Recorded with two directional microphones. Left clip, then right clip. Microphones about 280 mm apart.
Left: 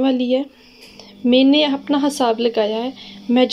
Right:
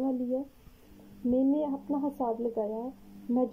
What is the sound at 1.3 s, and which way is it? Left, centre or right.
Speech, centre.